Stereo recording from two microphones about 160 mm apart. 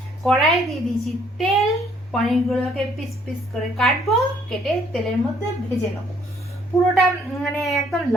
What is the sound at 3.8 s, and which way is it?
A woman's voice, centre (ahead or behind).